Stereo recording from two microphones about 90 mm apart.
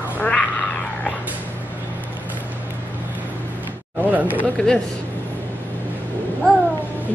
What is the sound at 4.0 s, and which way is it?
Speech, 20° right (ahead or behind).